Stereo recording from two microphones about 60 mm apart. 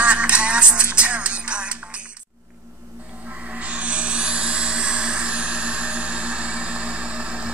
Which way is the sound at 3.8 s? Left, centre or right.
Centre.